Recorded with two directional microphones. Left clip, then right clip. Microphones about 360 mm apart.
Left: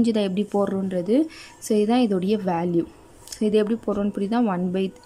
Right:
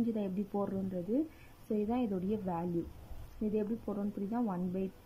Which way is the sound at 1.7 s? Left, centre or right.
Centre.